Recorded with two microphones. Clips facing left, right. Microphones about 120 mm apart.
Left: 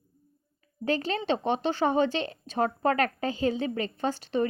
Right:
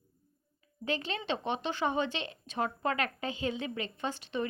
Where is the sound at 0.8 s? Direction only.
40° left (ahead or behind).